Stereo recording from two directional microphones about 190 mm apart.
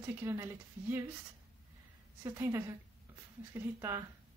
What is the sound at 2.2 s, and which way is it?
Speech, 15° right (ahead or behind).